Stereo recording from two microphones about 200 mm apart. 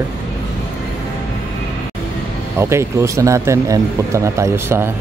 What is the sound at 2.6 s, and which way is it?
Speech, 15° right (ahead or behind).